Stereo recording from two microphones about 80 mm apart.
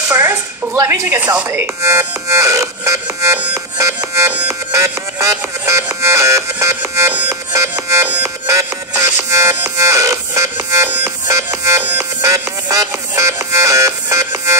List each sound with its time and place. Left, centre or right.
0.1 s a sound: right
0.8 s speech: right
7.5 s music: right